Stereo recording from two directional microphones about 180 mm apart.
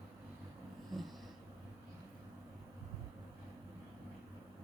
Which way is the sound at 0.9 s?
Centre (ahead or behind).